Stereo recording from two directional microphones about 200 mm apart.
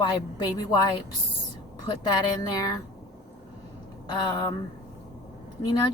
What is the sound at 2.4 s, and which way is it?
Speech, 20° left (ahead or behind).